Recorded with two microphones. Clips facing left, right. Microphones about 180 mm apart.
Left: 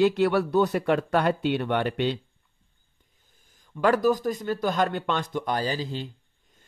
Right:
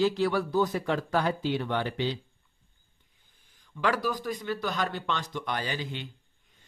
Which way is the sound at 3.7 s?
45° left (ahead or behind).